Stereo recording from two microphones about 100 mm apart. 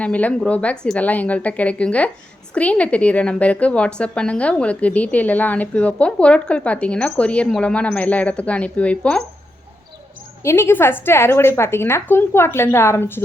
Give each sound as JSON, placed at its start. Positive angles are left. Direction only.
{"t": 0.0, "sound": "a woman's voice", "side_deg": 15}
{"t": 10.4, "sound": "a woman's voice", "side_deg": 25}